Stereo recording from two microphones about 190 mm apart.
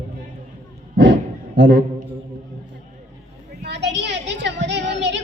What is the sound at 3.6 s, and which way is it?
Child singing, 65° right (ahead or behind).